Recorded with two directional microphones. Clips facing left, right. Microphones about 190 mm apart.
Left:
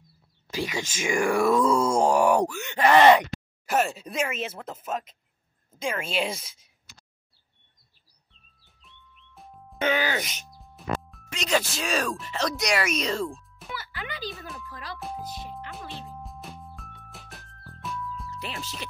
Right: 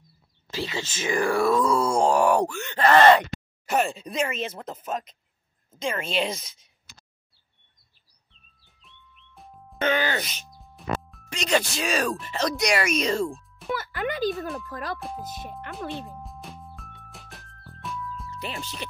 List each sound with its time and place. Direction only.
0.5 s speech: 15° left (ahead or behind)
1.8 s groan: 20° left (ahead or behind)
2.0 s speech: 10° left (ahead or behind)
8.6 s music: centre (ahead or behind)
9.8 s speech: 10° left (ahead or behind)
10.5 s speech: centre (ahead or behind)
13.7 s speech: 50° right (ahead or behind)
15.0 s speech: centre (ahead or behind)
15.9 s music: centre (ahead or behind)